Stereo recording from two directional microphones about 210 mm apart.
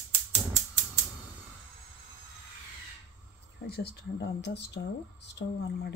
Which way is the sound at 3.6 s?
50° left (ahead or behind).